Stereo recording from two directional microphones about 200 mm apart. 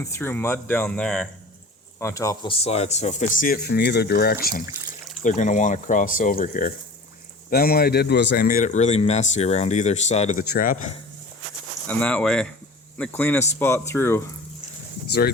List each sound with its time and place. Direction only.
0.0 s speech: 10° left (ahead or behind); by 10.4 s 35° left (ahead or behind)
10.5 s speech: 45° left (ahead or behind)
11.9 s speech: 5° left (ahead or behind)